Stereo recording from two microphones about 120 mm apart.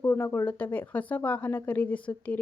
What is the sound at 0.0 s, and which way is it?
A woman's voice, 20° left (ahead or behind).